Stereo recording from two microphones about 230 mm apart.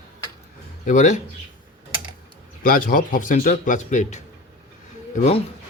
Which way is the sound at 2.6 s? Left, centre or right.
Left.